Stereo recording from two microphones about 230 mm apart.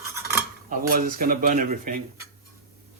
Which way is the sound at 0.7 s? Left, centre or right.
Right.